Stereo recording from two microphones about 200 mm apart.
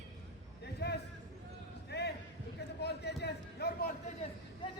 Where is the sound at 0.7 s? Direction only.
55° left (ahead or behind).